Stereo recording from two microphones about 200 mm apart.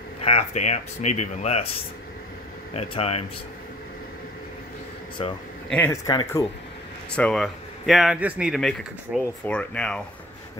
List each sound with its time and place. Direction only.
0.2 s speech: 30° left (ahead or behind)
2.7 s speech: 30° left (ahead or behind)
5.2 s speech: 30° left (ahead or behind)
5.7 s speech: 10° left (ahead or behind)
6.0 s speech: 20° left (ahead or behind)
7.1 s speech: 5° left (ahead or behind)